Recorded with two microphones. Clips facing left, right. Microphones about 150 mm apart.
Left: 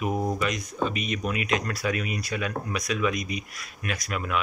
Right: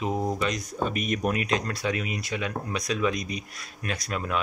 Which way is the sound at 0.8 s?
50° right (ahead or behind).